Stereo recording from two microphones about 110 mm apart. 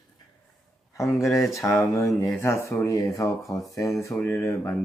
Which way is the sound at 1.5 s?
30° left (ahead or behind).